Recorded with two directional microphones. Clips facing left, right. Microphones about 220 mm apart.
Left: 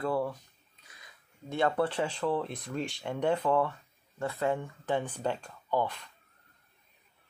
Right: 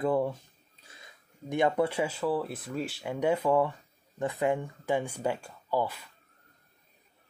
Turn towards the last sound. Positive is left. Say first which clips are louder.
# right 1 dB
turn(degrees=-5)  # may be behind; listen again after turning